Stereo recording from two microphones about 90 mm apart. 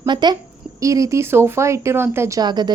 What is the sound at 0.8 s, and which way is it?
Speech, 35° right (ahead or behind).